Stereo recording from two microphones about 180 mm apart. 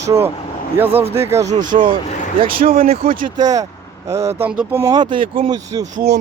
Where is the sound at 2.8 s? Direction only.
35° right (ahead or behind).